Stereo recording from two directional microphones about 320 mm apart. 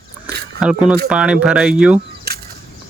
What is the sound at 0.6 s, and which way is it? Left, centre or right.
Speech, centre.